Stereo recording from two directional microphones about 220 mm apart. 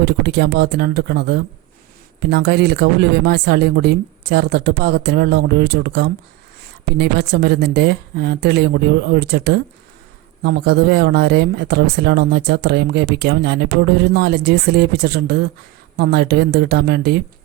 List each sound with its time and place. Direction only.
0.0 s speech: 50° right (ahead or behind)